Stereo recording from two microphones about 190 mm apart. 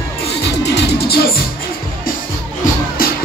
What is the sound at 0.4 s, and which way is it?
Music, 60° left (ahead or behind).